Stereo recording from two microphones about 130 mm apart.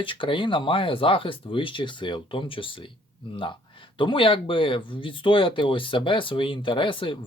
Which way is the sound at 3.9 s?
40° left (ahead or behind).